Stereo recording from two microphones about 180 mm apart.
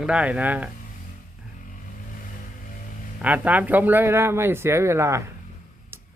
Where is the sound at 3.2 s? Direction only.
10° right (ahead or behind).